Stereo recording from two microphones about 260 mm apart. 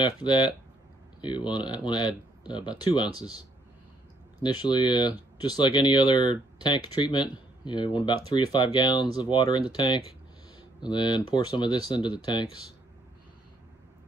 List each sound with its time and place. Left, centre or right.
0.0 s speech: centre
4.4 s speech: centre